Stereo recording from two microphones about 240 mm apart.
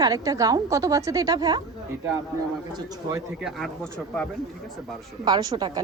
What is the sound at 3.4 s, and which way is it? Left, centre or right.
Speech, centre.